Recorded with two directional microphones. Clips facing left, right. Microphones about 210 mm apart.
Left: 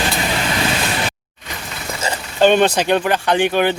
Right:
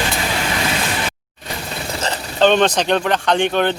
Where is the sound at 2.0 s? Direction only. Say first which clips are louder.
Left 1 dB; 10° left (ahead or behind).